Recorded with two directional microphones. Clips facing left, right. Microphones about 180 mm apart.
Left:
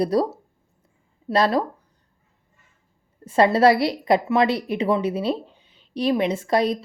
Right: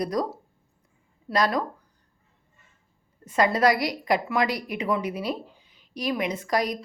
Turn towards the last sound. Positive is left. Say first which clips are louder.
# left 5 dB
turn(degrees=25)  # may be behind; listen again after turning